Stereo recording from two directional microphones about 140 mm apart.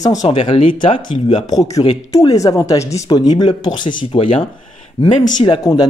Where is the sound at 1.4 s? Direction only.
25° left (ahead or behind).